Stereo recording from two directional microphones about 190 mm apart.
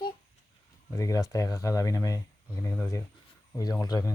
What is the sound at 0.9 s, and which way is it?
Speech, 15° left (ahead or behind).